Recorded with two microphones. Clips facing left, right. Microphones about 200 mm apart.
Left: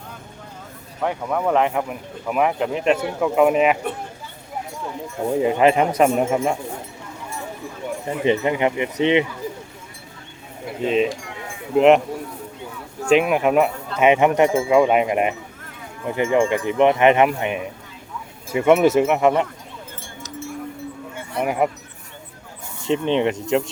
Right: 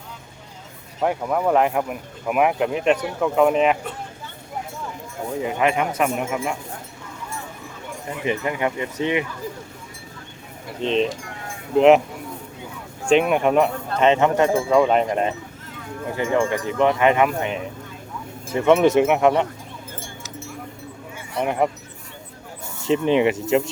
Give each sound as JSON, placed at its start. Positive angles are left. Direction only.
{"t": 1.0, "sound": "speech", "side_deg": -10}
{"t": 5.5, "sound": "a man's voice", "side_deg": 30}
{"t": 8.2, "sound": "speech", "side_deg": 25}
{"t": 10.8, "sound": "speech", "side_deg": 5}
{"t": 13.1, "sound": "speech", "side_deg": 5}
{"t": 21.4, "sound": "speech", "side_deg": 5}
{"t": 22.8, "sound": "speech", "side_deg": -5}